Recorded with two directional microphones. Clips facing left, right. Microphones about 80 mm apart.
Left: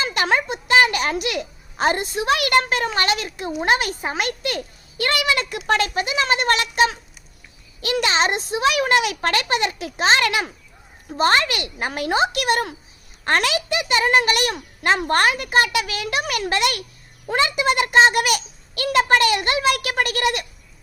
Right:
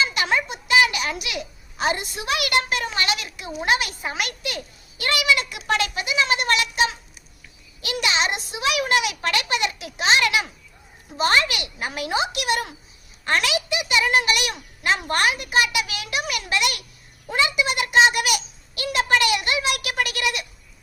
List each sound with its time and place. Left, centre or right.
0.0 s a child's voice: left
17.5 s a child's voice: left